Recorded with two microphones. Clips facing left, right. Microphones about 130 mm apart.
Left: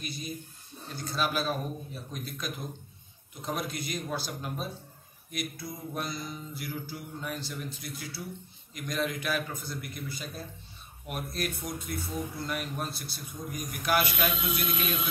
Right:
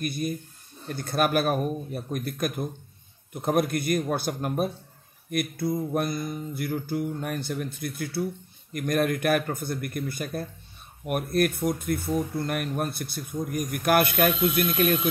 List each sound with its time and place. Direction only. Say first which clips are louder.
0.0 s speech: right 9 dB; 55° right (ahead or behind)